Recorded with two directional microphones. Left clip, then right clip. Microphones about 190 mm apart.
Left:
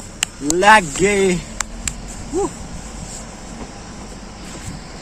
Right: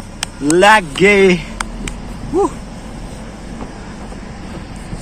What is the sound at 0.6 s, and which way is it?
Speech, centre (ahead or behind).